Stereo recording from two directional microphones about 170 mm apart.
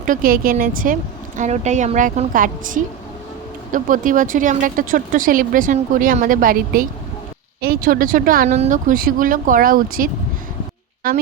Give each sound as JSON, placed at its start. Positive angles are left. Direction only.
{"t": 0.0, "sound": "speech", "side_deg": -55}